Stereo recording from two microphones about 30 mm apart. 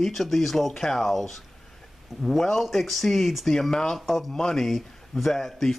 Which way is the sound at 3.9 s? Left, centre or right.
Centre.